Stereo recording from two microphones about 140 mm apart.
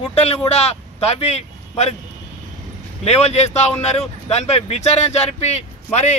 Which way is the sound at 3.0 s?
50° left (ahead or behind).